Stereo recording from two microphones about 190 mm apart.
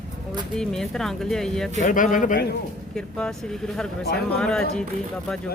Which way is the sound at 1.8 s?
45° left (ahead or behind).